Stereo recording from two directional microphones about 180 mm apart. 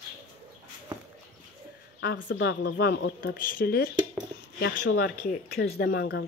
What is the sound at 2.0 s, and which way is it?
Speech, 75° left (ahead or behind).